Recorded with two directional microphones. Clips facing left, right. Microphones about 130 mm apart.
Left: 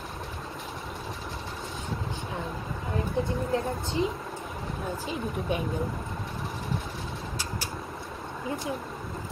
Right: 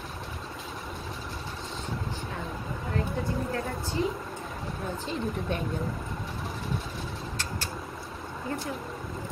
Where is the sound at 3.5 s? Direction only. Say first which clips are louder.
Left 3 dB; 20° left (ahead or behind).